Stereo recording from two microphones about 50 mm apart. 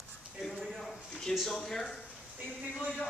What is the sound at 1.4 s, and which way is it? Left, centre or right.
Speech, centre.